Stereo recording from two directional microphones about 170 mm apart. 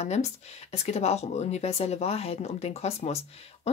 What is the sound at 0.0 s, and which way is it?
Speech, 40° left (ahead or behind).